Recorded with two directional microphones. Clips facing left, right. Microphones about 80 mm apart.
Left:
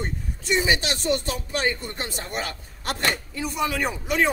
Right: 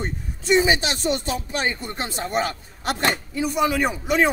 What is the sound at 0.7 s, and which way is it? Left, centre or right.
Speech, right.